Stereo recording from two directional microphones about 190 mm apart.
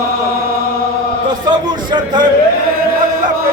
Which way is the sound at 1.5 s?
25° right (ahead or behind).